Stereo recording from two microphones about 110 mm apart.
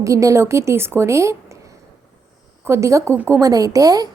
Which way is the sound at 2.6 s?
25° right (ahead or behind).